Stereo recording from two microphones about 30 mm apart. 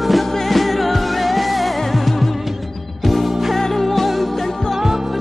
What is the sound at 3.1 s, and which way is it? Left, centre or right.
Music, centre.